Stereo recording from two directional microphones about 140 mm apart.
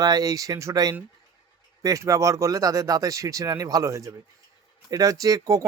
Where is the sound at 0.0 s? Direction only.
25° right (ahead or behind).